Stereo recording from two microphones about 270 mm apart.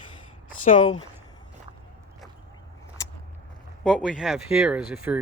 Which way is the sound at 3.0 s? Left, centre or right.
Centre.